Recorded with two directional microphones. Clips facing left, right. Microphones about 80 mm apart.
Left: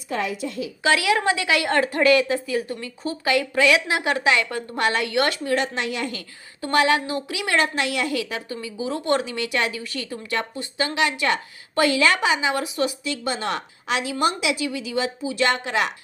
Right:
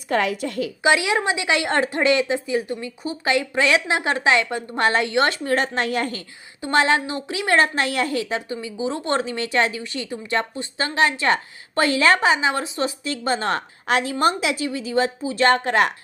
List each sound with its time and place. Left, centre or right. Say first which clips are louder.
0.1 s a woman's voice: right 4 dB; right
0.8 s a woman's voice: right 1 dB; right
5.4 s a woman's voice: right 2 dB; right
6.6 s a woman's voice: right 1 dB; right